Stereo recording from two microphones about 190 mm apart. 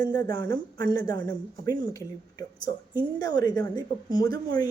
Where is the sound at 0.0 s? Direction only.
20° left (ahead or behind).